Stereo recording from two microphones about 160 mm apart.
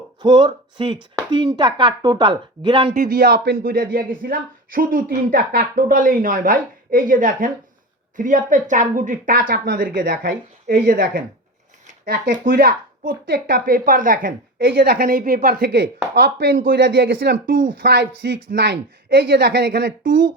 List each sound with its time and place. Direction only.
0.2 s speech: 30° right (ahead or behind)
2.9 s speech: 65° right (ahead or behind)
17.4 s speech: 60° right (ahead or behind); by 19.9 s 85° right